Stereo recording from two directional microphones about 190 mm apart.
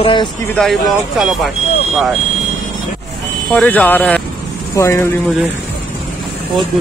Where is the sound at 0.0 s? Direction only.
25° left (ahead or behind).